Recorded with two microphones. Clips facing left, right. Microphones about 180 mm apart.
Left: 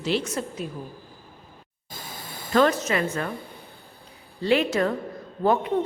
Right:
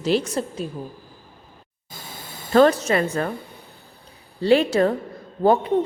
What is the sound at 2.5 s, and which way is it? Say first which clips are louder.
Speech: right 5 dB; 35° right (ahead or behind).